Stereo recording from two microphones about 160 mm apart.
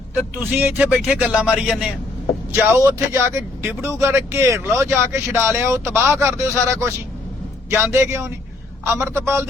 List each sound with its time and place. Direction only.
0.1 s speech: 10° right (ahead or behind)
2.6 s speech: 15° right (ahead or behind)